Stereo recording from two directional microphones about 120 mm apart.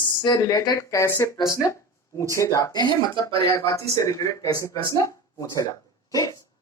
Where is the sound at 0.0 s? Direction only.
30° left (ahead or behind).